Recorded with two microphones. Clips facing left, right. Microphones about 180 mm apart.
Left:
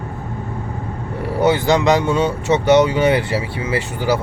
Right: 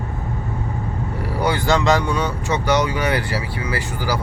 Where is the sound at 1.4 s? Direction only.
20° left (ahead or behind).